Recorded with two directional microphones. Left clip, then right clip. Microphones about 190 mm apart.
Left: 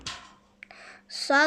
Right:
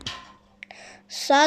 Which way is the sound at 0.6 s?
Centre (ahead or behind).